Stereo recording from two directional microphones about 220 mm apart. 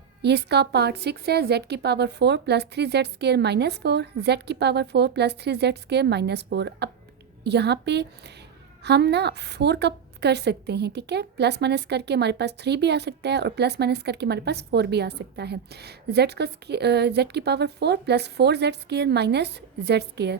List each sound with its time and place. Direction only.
0.2 s a woman's voice: 50° right (ahead or behind)